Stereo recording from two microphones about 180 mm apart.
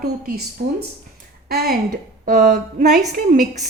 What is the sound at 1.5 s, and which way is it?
A woman's voice, 55° right (ahead or behind).